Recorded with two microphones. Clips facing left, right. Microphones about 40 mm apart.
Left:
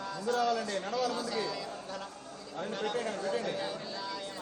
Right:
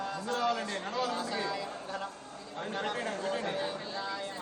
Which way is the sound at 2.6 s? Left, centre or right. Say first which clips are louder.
Left 1 dB; right.